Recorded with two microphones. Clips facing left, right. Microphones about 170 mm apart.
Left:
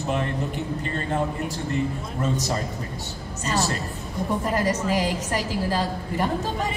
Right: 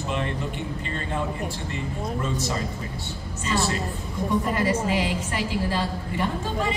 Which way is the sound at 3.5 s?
40° left (ahead or behind).